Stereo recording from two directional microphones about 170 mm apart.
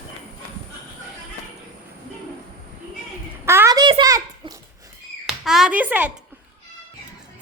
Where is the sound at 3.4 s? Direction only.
15° right (ahead or behind).